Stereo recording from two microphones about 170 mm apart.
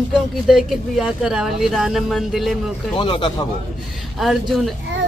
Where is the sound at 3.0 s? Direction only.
30° left (ahead or behind).